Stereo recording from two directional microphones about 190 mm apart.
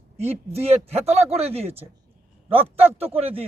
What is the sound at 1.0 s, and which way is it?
Speech, 35° right (ahead or behind).